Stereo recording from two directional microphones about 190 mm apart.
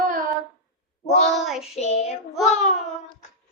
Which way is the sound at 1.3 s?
Centre (ahead or behind).